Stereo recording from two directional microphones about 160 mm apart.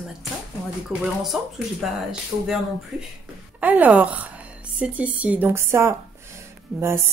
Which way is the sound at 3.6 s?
10° right (ahead or behind).